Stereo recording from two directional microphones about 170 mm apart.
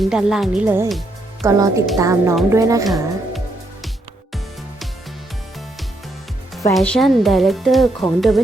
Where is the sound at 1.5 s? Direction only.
20° right (ahead or behind).